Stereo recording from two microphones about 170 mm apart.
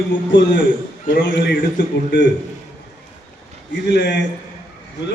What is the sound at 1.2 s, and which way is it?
Speech, 90° left.